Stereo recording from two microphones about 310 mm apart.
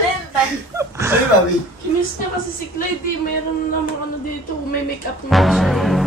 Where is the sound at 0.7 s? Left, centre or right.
Centre.